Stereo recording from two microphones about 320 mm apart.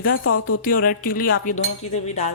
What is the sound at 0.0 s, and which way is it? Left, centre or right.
Speech, left.